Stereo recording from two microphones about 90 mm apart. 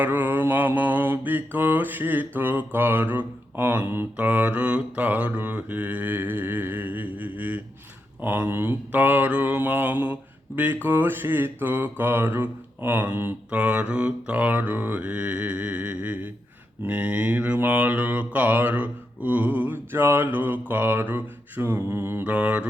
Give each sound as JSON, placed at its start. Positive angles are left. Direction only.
{"t": 0.0, "sound": "mantra", "side_deg": -20}